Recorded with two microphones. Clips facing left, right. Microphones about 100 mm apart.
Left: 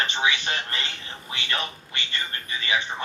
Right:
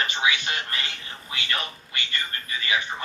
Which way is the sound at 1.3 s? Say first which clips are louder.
Left 1 dB; 25° left (ahead or behind).